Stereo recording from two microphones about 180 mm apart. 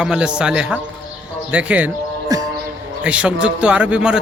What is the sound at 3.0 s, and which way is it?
A man's voice, 5° right (ahead or behind).